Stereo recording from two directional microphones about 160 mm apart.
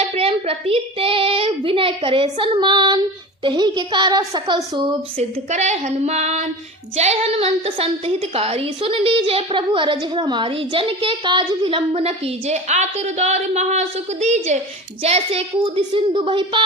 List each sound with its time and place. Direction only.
0.1 s a woman's voice: 35° right (ahead or behind)
5.5 s a sound: 45° right (ahead or behind)
6.9 s a woman's voice: 40° right (ahead or behind)